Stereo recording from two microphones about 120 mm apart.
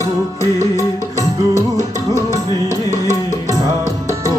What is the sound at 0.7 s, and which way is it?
Music, 25° left (ahead or behind).